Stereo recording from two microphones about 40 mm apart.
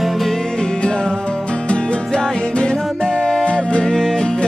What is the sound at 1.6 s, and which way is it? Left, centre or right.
Music, left.